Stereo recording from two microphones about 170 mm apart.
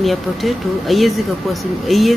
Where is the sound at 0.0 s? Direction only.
Centre (ahead or behind).